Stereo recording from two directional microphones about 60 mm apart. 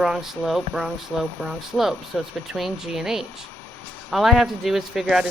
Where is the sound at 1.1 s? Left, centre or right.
Centre.